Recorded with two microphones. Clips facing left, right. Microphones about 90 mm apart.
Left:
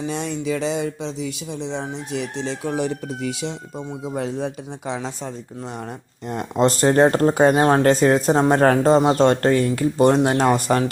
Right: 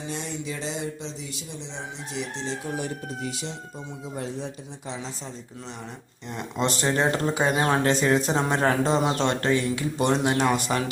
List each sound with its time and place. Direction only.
0.1 s speech: 85° left
1.7 s speech: 60° left (ahead or behind); by 3.5 s 90° left
4.1 s speech: 80° left; by 5.3 s 60° left (ahead or behind)
6.2 s speech: 45° left (ahead or behind)